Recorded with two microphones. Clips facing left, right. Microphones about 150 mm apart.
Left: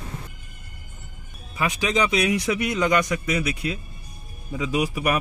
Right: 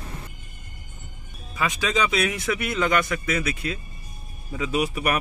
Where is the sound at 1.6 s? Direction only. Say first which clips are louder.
Left 1 dB; 15° left (ahead or behind).